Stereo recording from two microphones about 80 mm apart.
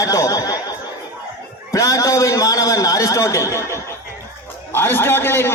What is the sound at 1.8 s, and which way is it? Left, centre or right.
A man's voice, left.